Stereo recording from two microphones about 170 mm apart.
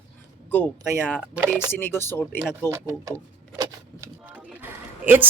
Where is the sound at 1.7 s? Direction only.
15° left (ahead or behind).